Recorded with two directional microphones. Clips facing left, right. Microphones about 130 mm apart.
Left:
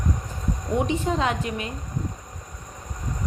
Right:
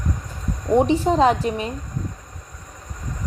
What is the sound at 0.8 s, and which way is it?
Speech, 35° right (ahead or behind).